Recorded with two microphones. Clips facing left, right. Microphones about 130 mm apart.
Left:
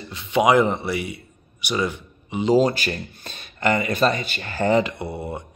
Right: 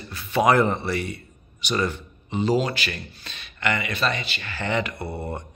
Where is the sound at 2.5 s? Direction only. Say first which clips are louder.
Left 6 dB; 40° left (ahead or behind).